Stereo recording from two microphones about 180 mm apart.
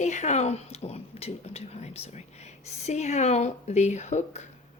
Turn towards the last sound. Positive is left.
turn(degrees=40)  # may be behind; listen again after turning